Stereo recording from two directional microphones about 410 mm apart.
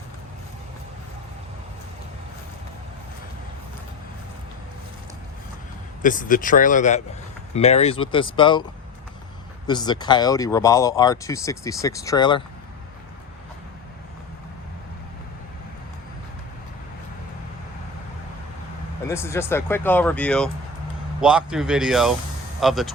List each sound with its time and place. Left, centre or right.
6.0 s speech: centre
9.6 s speech: centre
19.0 s speech: centre